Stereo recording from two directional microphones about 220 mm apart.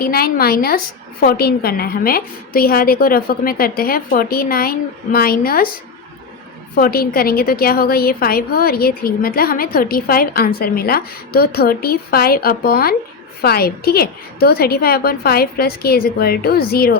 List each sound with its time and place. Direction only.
0.0 s a woman's voice: 45° left (ahead or behind)